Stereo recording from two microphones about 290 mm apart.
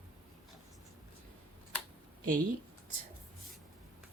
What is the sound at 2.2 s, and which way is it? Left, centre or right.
Speech, right.